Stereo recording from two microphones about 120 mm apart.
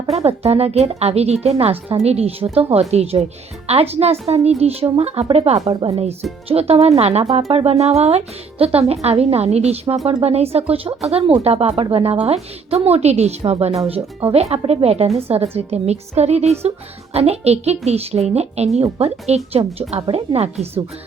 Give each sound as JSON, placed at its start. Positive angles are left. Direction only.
{"t": 0.1, "sound": "a woman's voice", "side_deg": -60}